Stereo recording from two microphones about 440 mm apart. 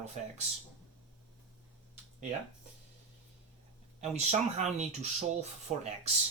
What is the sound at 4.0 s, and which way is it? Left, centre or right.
Speech, centre.